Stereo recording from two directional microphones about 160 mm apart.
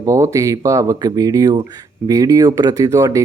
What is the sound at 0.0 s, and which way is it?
Speech, 20° right (ahead or behind).